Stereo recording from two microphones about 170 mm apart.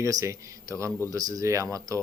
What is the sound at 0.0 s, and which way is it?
Speech, 20° right (ahead or behind).